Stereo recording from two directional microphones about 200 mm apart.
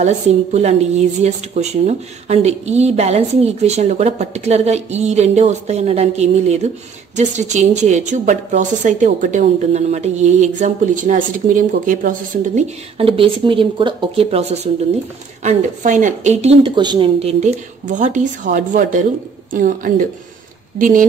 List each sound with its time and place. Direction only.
0.0 s speech: 35° right (ahead or behind)
12.9 s speech: 30° right (ahead or behind)